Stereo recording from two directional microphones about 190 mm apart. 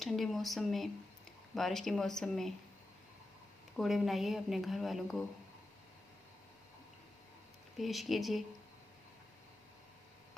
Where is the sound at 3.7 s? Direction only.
Centre (ahead or behind).